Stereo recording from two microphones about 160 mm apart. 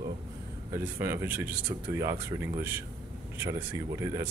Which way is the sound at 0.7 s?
15° right (ahead or behind).